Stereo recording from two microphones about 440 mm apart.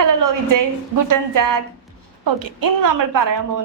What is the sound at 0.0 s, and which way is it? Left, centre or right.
A woman's voice, right.